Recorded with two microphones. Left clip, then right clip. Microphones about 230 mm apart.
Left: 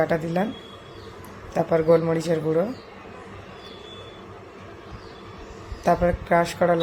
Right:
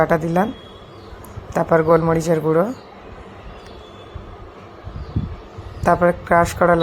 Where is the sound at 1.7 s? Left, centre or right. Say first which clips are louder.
Right 4 dB; centre.